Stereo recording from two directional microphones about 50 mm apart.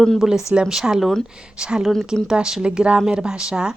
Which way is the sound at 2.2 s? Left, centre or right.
Centre.